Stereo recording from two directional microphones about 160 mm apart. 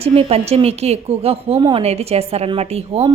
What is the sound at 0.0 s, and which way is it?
A woman's voice, 35° right (ahead or behind).